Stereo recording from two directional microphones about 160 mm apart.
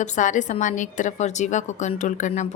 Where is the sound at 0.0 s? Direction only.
50° left (ahead or behind).